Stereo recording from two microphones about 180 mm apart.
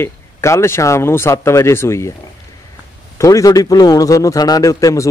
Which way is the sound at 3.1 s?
15° left (ahead or behind).